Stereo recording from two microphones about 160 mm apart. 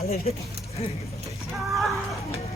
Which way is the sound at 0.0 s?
40° left (ahead or behind).